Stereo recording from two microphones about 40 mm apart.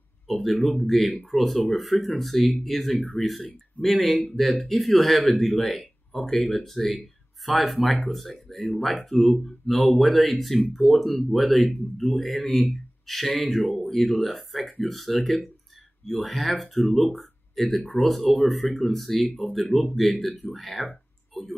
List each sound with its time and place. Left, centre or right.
0.3 s speech: centre
13.6 s speech: left
13.8 s speech: centre
21.3 s a sound: centre